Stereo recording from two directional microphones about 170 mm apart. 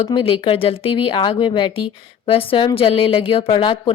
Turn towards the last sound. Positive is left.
turn(degrees=30)  # may be behind; listen again after turning